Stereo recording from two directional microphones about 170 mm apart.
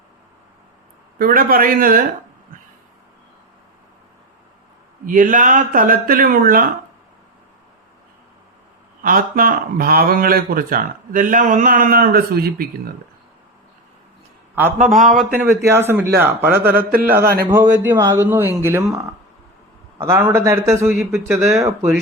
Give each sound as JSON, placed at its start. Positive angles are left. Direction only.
{"t": 1.2, "sound": "speech", "side_deg": -55}
{"t": 5.0, "sound": "speech", "side_deg": -50}
{"t": 9.0, "sound": "speech", "side_deg": -55}
{"t": 14.8, "sound": "speech", "side_deg": -50}
{"t": 15.0, "sound": "speech", "side_deg": 0}
{"t": 15.4, "sound": "a man's voice", "side_deg": -15}
{"t": 16.6, "sound": "speech", "side_deg": -60}
{"t": 17.5, "sound": "a man's voice", "side_deg": -10}
{"t": 20.0, "sound": "a man's voice", "side_deg": -15}